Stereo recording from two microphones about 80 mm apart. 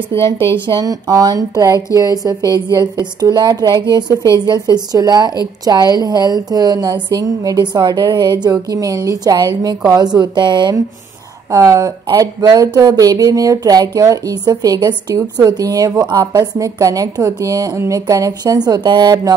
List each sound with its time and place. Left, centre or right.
0.1 s speech: left
0.8 s speech: right
2.5 s a woman's voice: right
11.5 s speech: right